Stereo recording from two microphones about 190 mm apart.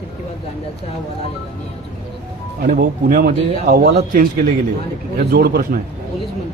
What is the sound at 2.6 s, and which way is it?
Speech, 50° right (ahead or behind).